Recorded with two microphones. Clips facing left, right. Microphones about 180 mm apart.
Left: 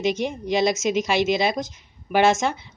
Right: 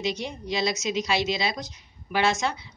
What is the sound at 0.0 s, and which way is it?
A woman's voice, 50° left (ahead or behind).